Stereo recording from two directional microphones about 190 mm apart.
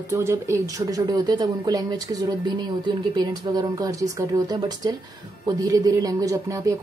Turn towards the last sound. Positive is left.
turn(degrees=-15)  # may be behind; listen again after turning